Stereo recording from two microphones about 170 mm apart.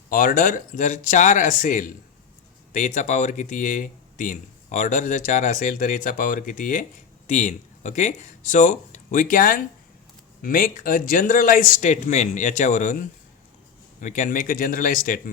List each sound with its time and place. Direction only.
0.1 s speech: 55° left (ahead or behind)